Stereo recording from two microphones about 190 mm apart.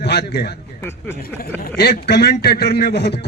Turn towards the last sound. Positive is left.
turn(degrees=60)  # may be behind; listen again after turning